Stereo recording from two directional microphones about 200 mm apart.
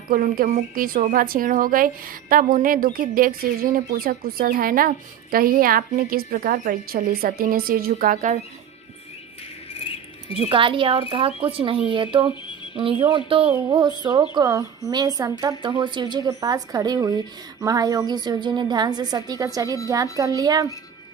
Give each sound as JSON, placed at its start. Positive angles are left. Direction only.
{"t": 0.1, "sound": "speech", "side_deg": -45}
{"t": 9.8, "sound": "rodents", "side_deg": 25}
{"t": 10.3, "sound": "a woman's voice", "side_deg": -25}